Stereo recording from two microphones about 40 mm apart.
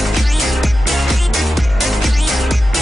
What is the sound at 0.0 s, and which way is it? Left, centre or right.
Music, centre.